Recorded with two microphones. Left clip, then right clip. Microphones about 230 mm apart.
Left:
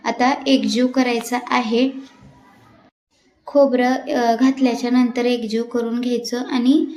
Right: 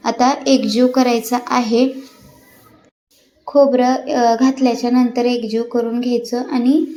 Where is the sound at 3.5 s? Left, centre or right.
Centre.